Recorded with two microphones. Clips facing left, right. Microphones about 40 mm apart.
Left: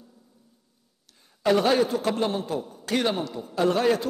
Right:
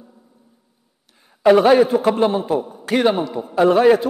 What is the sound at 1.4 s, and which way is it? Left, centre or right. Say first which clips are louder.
A man's voice: right 9 dB; centre.